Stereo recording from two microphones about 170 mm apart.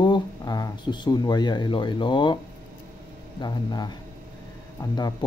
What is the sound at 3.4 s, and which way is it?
Speech, 25° left (ahead or behind).